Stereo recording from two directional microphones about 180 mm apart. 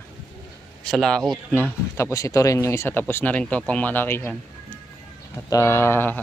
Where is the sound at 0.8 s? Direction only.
5° left (ahead or behind).